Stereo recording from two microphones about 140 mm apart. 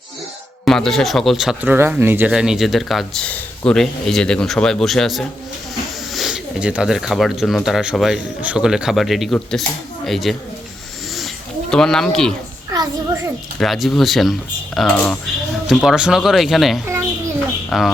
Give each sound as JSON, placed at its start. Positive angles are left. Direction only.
{"t": 0.6, "sound": "speech", "side_deg": 5}
{"t": 1.7, "sound": "speech", "side_deg": -15}
{"t": 2.3, "sound": "speech", "side_deg": -5}
{"t": 11.7, "sound": "speech", "side_deg": 5}
{"t": 12.7, "sound": "a child's voice", "side_deg": -30}
{"t": 13.6, "sound": "speech", "side_deg": 0}